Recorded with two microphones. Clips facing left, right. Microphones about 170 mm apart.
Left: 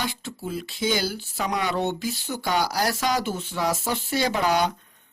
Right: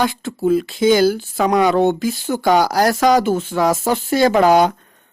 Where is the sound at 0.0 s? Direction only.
50° right (ahead or behind).